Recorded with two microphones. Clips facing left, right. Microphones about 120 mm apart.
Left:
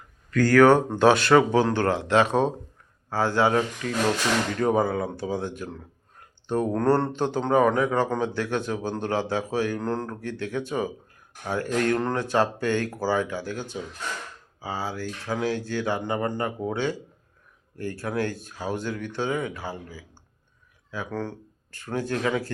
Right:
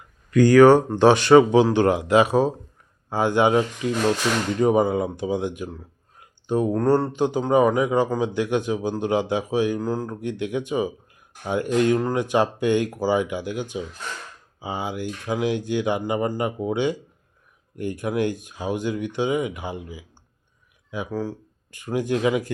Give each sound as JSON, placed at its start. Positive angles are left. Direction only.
{"t": 0.3, "sound": "speech", "side_deg": -15}